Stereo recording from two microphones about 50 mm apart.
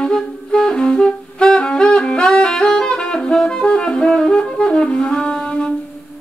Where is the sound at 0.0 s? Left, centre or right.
Centre.